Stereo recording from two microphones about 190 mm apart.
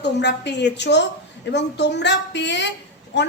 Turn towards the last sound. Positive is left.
turn(degrees=70)  # may be behind; listen again after turning